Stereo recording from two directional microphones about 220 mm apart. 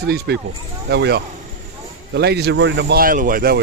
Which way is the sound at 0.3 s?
50° right (ahead or behind).